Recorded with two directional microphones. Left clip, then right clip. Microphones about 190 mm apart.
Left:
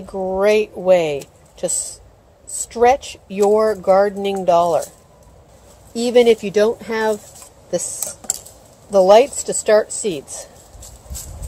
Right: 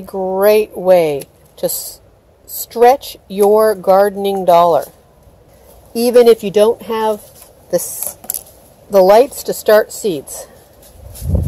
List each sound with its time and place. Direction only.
0.0 s speech: 35° right (ahead or behind)
5.9 s speech: 45° right (ahead or behind)
6.5 s speech: 25° right (ahead or behind)
8.9 s speech: 40° right (ahead or behind)